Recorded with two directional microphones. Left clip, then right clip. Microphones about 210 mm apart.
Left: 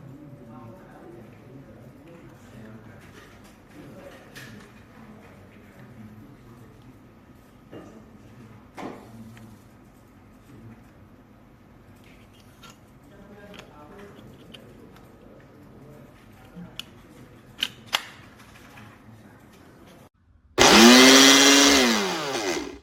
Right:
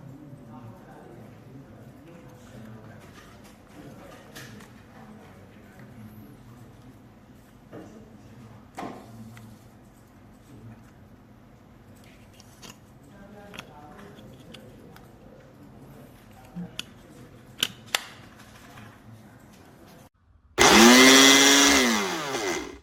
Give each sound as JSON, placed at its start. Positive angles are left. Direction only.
{"t": 20.6, "sound": "chainsaw", "side_deg": -5}